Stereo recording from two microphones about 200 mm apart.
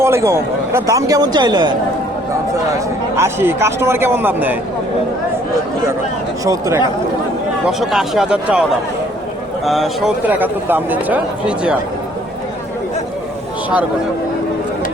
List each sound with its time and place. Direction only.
0.0 s a man's voice: 15° right (ahead or behind)
2.7 s a man's voice: 15° right (ahead or behind)
6.4 s a man's voice: 15° right (ahead or behind)
7.7 s speech: centre (ahead or behind)
9.6 s a man's voice: centre (ahead or behind)